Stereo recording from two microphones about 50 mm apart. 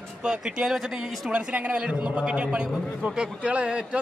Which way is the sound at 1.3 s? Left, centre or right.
Right.